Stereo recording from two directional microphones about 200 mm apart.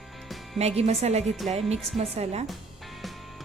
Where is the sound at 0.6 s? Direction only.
30° right (ahead or behind).